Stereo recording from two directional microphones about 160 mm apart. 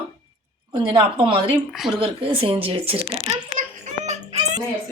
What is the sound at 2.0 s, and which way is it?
Speech, 35° right (ahead or behind).